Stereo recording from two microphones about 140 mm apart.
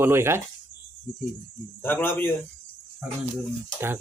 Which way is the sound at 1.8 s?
15° left (ahead or behind).